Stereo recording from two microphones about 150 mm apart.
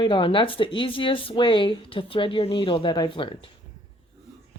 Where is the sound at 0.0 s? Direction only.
30° left (ahead or behind).